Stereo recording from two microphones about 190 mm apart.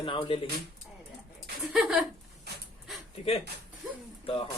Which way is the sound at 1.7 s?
Centre (ahead or behind).